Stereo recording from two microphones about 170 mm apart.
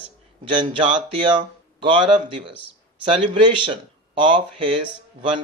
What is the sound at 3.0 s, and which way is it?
Speech, 30° right (ahead or behind).